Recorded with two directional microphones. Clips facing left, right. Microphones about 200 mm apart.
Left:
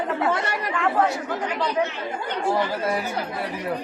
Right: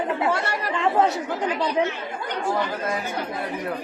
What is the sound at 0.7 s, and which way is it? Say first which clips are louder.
Speech: right 2 dB; 20° right (ahead or behind).